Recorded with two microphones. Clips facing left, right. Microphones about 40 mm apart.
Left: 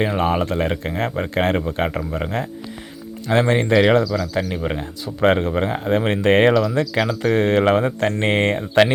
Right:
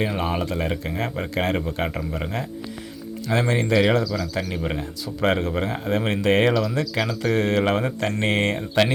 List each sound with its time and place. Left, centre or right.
0.2 s speech: left
2.2 s speech: centre
3.2 s speech: left
3.8 s speech: left
4.0 s speech: centre
4.4 s speech: centre
4.8 s speech: left
6.5 s speech: centre
7.2 s speech: left